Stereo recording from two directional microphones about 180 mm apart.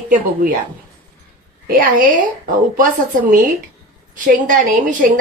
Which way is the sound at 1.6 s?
50° right (ahead or behind).